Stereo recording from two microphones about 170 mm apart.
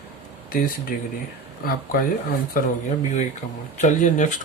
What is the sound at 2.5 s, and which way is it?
Speech, 45° left (ahead or behind).